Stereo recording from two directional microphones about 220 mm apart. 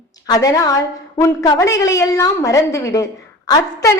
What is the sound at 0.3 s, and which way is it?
A woman's voice, 15° left (ahead or behind).